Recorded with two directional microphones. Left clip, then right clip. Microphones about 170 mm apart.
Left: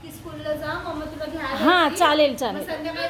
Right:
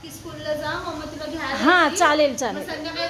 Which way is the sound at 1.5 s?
Centre (ahead or behind).